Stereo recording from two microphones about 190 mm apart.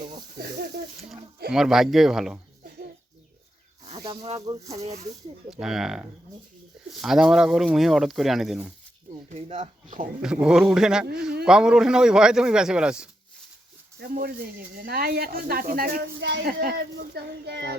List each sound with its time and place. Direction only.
1.5 s speech: centre (ahead or behind)
3.8 s speech: 25° right (ahead or behind)
5.5 s speech: centre (ahead or behind)
9.3 s speech: 35° right (ahead or behind)
10.2 s speech: 5° right (ahead or behind)
14.0 s speech: 55° right (ahead or behind)